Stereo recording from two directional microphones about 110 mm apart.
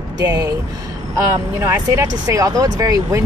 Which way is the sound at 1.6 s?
25° right (ahead or behind).